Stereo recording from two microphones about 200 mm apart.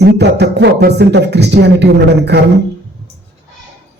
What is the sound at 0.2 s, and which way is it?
Speech, 55° right (ahead or behind).